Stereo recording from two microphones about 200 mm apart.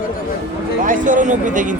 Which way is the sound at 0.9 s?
40° right (ahead or behind).